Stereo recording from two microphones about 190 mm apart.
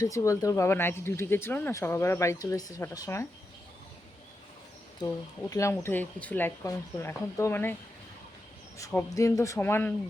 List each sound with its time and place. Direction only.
0.0 s speech: 15° left (ahead or behind)
4.9 s speech: 20° left (ahead or behind)
9.1 s speech: 20° left (ahead or behind)